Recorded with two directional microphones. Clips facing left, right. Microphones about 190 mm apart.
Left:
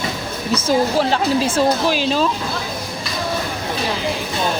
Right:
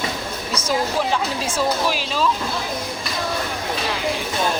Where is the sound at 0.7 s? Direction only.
30° left (ahead or behind).